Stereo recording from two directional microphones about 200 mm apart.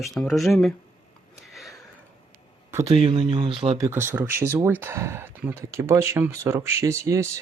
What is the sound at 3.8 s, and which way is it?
Speech, 10° right (ahead or behind).